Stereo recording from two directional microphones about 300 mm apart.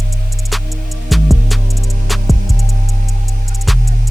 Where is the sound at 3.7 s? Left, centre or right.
Centre.